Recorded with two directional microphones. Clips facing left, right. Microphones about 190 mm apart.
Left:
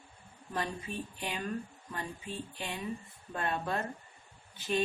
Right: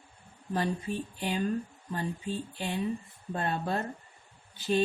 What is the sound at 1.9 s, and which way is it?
Speech, 30° right (ahead or behind).